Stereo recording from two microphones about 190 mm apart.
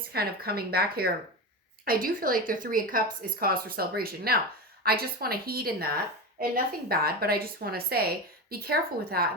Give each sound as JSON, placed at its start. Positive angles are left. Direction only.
{"t": 0.1, "sound": "a woman's voice", "side_deg": -55}